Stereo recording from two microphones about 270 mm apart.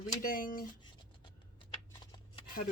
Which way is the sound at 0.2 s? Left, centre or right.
Left.